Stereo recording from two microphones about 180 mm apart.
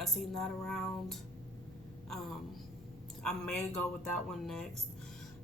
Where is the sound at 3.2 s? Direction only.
5° left (ahead or behind).